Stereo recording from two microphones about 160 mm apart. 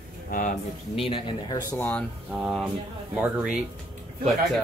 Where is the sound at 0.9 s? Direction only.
35° left (ahead or behind).